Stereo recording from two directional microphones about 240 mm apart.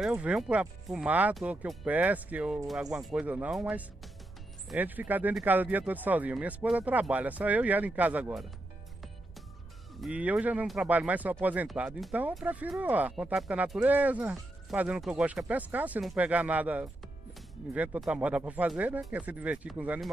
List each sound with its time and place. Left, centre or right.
0.0 s speech: centre
9.9 s speech: centre